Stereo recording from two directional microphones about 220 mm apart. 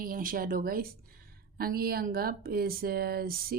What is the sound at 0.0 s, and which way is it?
A woman's voice, 40° right (ahead or behind).